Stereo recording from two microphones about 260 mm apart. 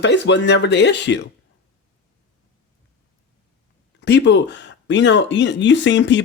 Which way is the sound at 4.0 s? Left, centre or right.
Left.